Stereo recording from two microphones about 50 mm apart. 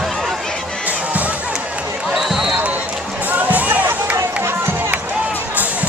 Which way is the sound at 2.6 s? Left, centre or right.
Right.